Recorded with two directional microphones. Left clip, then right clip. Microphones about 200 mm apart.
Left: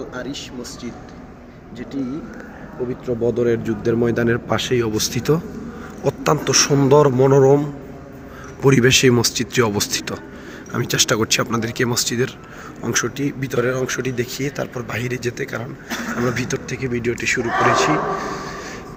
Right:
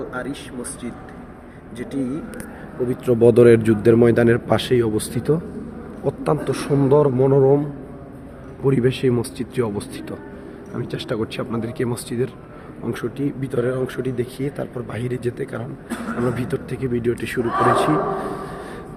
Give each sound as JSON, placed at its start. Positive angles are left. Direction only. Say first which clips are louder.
{"t": 0.1, "sound": "speech", "louder": "even", "side_deg": -5}
{"t": 3.1, "sound": "speech", "louder": "right 7 dB", "side_deg": -60}
{"t": 3.6, "sound": "speech", "louder": "right 5 dB", "side_deg": -35}
{"t": 3.9, "sound": "a man's voice", "louder": "right 4 dB", "side_deg": -20}